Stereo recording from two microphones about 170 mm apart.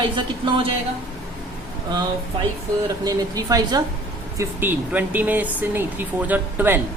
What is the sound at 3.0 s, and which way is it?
Speech, 20° right (ahead or behind).